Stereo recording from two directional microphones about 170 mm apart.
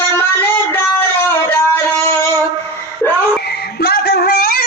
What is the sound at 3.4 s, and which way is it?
Music, 70° left (ahead or behind).